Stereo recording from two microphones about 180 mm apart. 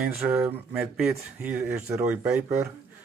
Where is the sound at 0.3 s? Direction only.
10° right (ahead or behind).